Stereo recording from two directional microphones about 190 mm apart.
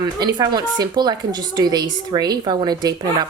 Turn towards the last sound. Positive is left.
turn(degrees=-20)  # may be behind; listen again after turning